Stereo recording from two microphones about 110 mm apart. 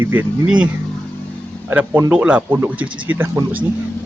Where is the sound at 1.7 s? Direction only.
15° right (ahead or behind).